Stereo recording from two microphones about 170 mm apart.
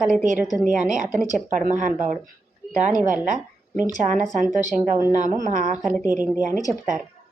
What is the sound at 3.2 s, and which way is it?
Speech, 45° right (ahead or behind).